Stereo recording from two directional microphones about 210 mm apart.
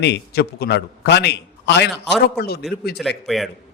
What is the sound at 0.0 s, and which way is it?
A man's voice, 50° left (ahead or behind).